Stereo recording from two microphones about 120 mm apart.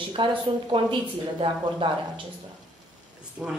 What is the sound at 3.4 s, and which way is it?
Speech, centre (ahead or behind).